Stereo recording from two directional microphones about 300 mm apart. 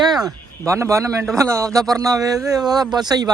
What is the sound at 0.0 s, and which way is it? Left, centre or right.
Speech, centre.